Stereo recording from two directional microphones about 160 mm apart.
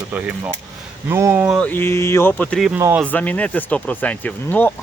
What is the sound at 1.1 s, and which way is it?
Speech, 15° right (ahead or behind).